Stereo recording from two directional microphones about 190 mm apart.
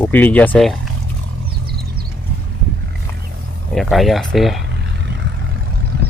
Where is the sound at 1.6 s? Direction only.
55° right (ahead or behind).